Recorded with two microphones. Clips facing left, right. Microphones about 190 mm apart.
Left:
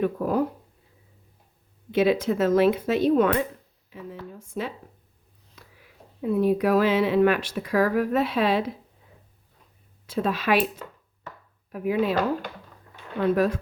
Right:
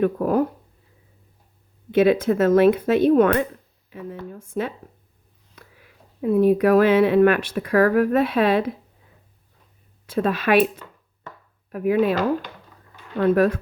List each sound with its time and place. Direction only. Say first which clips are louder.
0.0 s speech: right 4 dB; 55° right (ahead or behind)
1.9 s speech: right 4 dB; 55° right (ahead or behind)
5.6 s a sound: right 3 dB; 55° right (ahead or behind)
6.2 s speech: right 5 dB; 55° right (ahead or behind)
10.1 s speech: right 4 dB; 55° right (ahead or behind)
11.7 s speech: right 5 dB; 55° right (ahead or behind)
13.1 s speech: right 4 dB; 55° right (ahead or behind)